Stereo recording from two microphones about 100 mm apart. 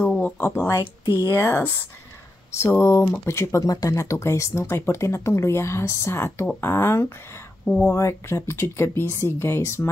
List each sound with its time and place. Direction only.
0.2 s speech: 20° left (ahead or behind)
7.6 s speech: 10° left (ahead or behind)
7.9 s speech: 30° left (ahead or behind)